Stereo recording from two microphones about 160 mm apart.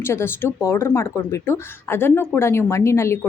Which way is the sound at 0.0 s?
15° left (ahead or behind).